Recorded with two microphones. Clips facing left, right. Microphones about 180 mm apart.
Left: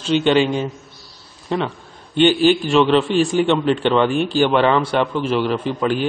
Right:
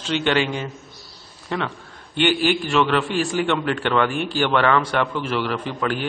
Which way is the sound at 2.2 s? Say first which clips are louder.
Left 6 dB; 15° right (ahead or behind).